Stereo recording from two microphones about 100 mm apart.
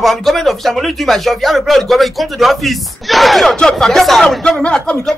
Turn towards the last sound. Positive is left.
turn(degrees=5)  # may be behind; listen again after turning